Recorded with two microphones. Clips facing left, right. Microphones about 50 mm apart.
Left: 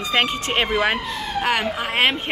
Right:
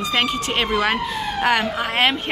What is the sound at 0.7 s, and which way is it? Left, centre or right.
Speech, centre.